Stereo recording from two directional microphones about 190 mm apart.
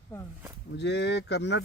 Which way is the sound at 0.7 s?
65° left (ahead or behind).